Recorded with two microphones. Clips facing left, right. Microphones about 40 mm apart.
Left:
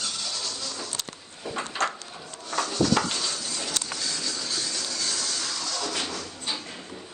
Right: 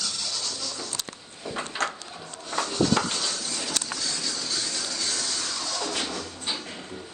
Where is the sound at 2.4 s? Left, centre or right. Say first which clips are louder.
Even; centre.